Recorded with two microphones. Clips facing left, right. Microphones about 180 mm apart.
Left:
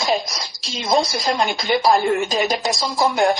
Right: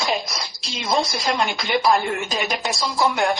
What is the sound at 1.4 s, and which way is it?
Speech, 35° left (ahead or behind).